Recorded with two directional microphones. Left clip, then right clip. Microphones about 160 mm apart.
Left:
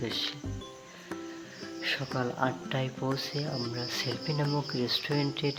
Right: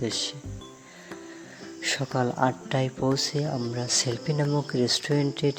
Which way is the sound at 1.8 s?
40° right (ahead or behind).